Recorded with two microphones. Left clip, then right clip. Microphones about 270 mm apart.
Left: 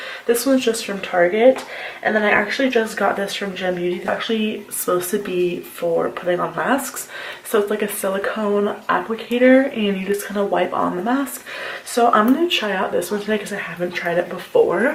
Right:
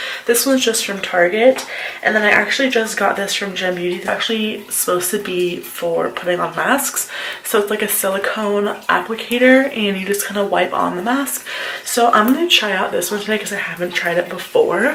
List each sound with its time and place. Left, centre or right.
0.3 s speech: centre